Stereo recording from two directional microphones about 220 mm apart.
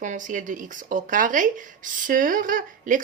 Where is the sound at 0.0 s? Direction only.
35° right (ahead or behind).